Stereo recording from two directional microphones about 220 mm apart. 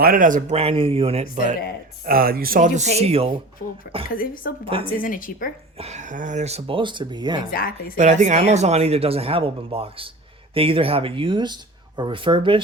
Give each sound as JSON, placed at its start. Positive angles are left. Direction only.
{"t": 0.0, "sound": "speech", "side_deg": -40}
{"t": 2.0, "sound": "speech", "side_deg": -40}
{"t": 4.1, "sound": "a woman's voice", "side_deg": 40}
{"t": 5.7, "sound": "speech", "side_deg": -30}
{"t": 7.5, "sound": "a woman's voice", "side_deg": 40}
{"t": 7.9, "sound": "speech", "side_deg": -35}